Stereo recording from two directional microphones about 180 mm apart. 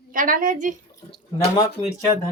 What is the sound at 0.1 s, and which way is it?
Speech, 50° right (ahead or behind).